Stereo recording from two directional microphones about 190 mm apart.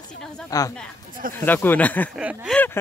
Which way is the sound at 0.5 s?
20° left (ahead or behind).